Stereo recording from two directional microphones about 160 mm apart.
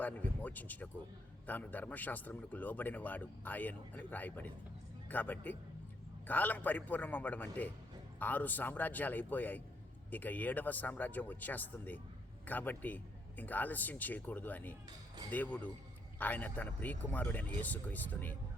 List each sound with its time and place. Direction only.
0.0 s speech: 10° left (ahead or behind)
14.8 s speech: 25° right (ahead or behind)
15.3 s speech: 10° left (ahead or behind)